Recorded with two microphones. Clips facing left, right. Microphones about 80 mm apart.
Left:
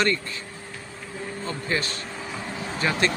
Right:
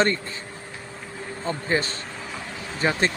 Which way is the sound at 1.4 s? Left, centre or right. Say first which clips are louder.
Right 4 dB; right.